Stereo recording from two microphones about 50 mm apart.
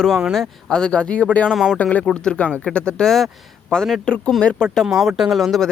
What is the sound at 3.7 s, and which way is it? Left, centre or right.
A man's voice, centre.